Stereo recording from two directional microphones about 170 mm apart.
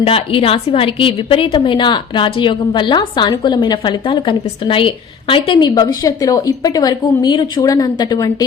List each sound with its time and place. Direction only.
0.0 s a woman's voice: 35° left (ahead or behind)